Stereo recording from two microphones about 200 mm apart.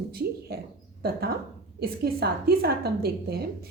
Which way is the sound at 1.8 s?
50° right (ahead or behind).